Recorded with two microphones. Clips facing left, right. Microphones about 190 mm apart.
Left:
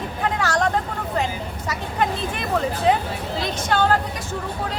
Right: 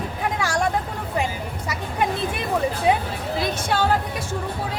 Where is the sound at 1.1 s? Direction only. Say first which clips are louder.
Even; 10° right (ahead or behind).